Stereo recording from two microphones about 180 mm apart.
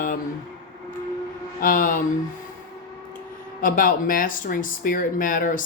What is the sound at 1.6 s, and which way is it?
Speech, 50° left (ahead or behind).